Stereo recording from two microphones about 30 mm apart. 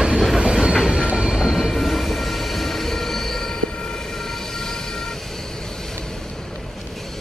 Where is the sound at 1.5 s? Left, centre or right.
Centre.